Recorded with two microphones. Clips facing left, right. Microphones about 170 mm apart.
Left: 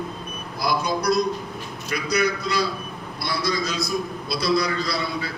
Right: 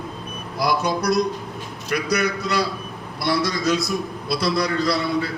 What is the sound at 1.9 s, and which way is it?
A man's voice, 60° right (ahead or behind).